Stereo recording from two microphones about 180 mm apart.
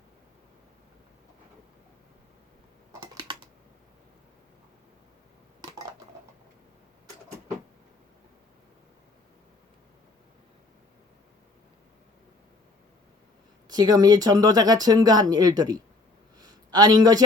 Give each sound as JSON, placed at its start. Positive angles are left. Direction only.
{"t": 3.0, "sound": "typing", "side_deg": -25}
{"t": 13.7, "sound": "speech", "side_deg": -20}
{"t": 16.4, "sound": "a sound", "side_deg": -20}